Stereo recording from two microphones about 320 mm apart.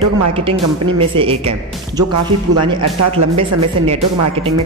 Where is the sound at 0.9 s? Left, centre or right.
Centre.